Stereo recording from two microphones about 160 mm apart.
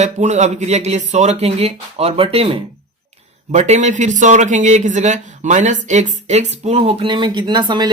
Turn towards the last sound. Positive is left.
turn(degrees=-25)  # may be behind; listen again after turning